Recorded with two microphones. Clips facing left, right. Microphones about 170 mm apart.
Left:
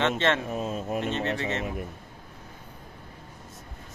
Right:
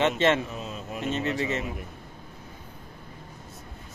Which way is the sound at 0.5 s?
50° left (ahead or behind).